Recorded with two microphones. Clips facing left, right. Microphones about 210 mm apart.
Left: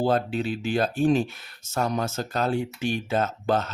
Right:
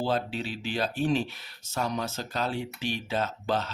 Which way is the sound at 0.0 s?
50° left (ahead or behind).